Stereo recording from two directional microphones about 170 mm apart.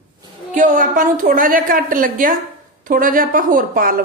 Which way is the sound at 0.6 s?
50° right (ahead or behind).